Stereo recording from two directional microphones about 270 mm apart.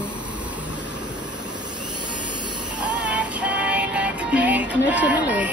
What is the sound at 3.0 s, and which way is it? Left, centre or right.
Music, centre.